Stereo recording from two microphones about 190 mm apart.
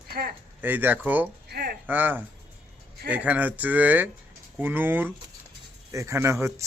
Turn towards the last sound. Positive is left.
turn(degrees=-15)  # may be behind; listen again after turning